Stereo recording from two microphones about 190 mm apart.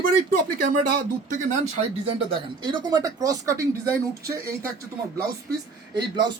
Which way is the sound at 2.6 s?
20° right (ahead or behind).